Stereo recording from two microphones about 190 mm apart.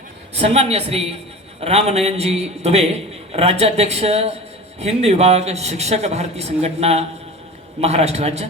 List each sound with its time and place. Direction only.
0.3 s a man's voice: 30° right (ahead or behind)